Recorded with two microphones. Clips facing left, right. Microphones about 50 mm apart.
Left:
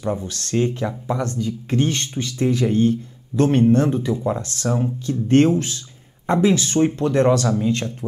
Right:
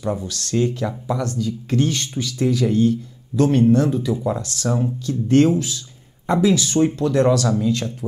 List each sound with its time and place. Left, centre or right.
0.0 s speech: left
4.6 s speech: centre
5.0 s speech: left